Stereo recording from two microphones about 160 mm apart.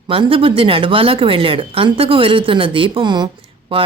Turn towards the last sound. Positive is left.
turn(degrees=-35)  # may be behind; listen again after turning